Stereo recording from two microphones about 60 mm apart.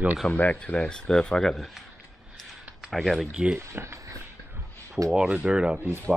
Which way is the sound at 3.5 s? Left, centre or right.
Right.